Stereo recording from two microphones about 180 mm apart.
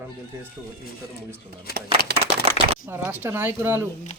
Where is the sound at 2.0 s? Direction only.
25° left (ahead or behind).